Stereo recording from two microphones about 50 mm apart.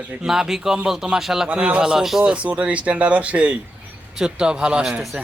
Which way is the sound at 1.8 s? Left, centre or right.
Centre.